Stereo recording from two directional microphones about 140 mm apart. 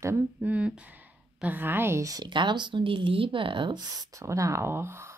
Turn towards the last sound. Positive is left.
turn(degrees=-15)  # may be behind; listen again after turning